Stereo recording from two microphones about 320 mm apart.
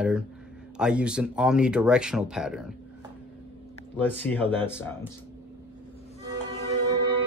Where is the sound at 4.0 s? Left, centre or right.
Centre.